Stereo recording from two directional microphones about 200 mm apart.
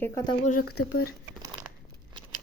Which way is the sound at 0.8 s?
90° left.